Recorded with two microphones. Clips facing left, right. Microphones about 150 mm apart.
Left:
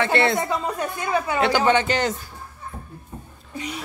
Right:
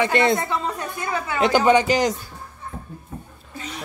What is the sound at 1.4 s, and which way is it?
Speech, 15° right (ahead or behind).